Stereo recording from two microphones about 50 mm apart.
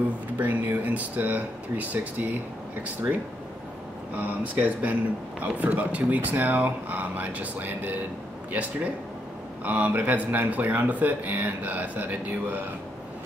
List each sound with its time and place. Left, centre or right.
0.4 s speech: right